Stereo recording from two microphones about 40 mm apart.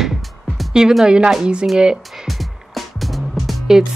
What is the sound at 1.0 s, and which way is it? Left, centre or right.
Speech, right.